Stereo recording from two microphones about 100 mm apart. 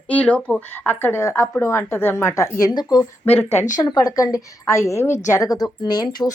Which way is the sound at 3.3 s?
25° left (ahead or behind).